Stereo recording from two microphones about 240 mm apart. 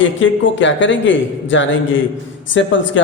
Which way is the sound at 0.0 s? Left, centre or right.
Left.